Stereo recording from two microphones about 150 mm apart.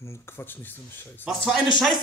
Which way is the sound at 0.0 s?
15° left (ahead or behind).